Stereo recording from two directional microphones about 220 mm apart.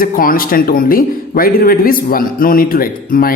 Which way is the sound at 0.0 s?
40° left (ahead or behind).